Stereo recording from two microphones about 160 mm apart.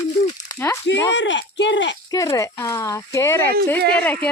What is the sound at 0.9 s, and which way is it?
Speech, 90° left.